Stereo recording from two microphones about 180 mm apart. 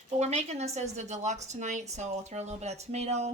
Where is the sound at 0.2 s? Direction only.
40° right (ahead or behind).